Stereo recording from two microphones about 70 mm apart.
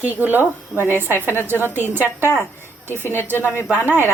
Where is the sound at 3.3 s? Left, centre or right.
Left.